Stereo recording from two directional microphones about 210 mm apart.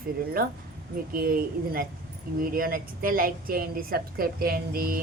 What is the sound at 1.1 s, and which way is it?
A woman's voice, 45° right (ahead or behind).